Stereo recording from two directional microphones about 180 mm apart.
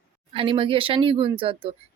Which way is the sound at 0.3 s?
30° right (ahead or behind).